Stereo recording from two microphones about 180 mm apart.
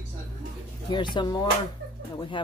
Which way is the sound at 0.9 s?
25° left (ahead or behind).